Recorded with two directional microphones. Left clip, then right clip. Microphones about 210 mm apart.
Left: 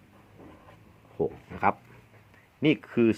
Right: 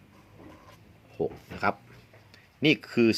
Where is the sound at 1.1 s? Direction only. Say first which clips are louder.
Left 1 dB; 20° left (ahead or behind).